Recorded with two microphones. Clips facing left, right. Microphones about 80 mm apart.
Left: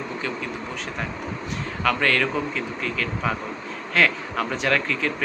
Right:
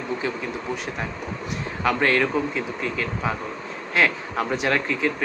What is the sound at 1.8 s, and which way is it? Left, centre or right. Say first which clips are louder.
Speech: right 1 dB; right.